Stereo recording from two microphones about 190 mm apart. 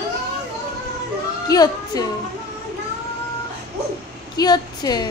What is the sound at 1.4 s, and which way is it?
Child singing, 20° left (ahead or behind).